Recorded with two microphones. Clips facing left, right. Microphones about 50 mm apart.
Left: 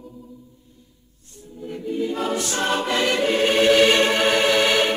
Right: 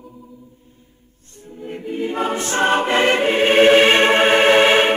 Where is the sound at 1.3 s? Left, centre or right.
Right.